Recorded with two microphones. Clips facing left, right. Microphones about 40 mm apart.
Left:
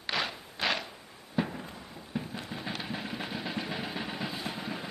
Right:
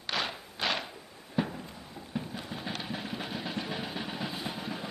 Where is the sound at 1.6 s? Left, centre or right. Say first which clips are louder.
Left 1 dB; centre.